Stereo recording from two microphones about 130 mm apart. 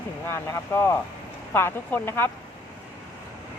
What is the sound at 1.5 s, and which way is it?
Speech, 15° left (ahead or behind).